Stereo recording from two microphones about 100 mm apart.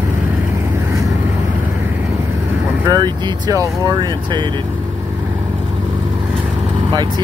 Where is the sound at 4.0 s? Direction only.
50° right (ahead or behind).